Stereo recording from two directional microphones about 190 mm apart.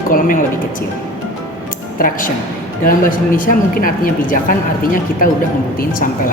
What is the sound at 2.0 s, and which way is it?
Speech, 45° left (ahead or behind).